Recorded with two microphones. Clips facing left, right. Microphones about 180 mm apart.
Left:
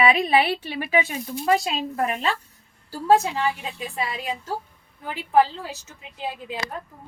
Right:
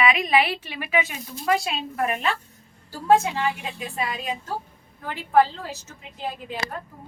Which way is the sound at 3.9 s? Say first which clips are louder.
Even; 30° left (ahead or behind).